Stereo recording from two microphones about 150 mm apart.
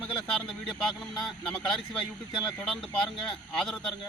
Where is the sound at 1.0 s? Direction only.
Centre (ahead or behind).